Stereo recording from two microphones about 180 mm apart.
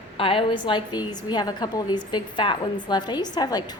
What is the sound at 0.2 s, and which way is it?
A woman's voice, 30° left (ahead or behind).